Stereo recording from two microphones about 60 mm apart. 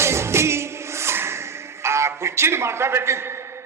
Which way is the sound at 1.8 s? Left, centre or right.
Right.